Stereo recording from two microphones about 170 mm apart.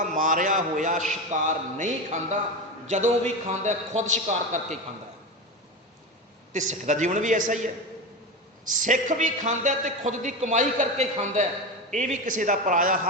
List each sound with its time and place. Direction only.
0.0 s a man's voice: 50° right (ahead or behind)
6.5 s a man's voice: 45° right (ahead or behind)
8.7 s a man's voice: 50° right (ahead or behind)